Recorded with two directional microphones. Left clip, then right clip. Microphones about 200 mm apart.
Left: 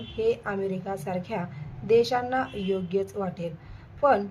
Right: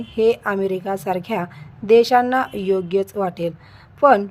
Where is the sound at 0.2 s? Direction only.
40° right (ahead or behind).